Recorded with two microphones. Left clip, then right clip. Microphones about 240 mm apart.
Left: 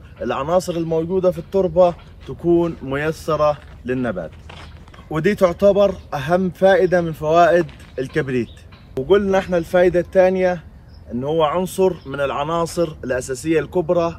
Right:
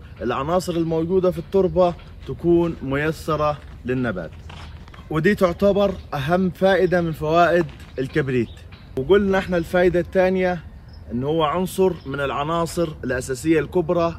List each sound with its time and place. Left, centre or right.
0.2 s speech: centre